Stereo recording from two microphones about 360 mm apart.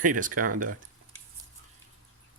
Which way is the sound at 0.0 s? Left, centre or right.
Right.